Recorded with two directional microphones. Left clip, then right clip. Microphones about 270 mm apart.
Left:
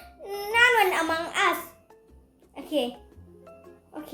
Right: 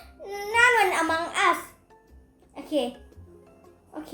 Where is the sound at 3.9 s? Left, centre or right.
Centre.